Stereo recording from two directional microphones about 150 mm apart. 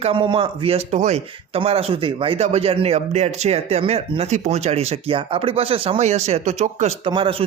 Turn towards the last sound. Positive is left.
turn(degrees=-35)  # may be behind; listen again after turning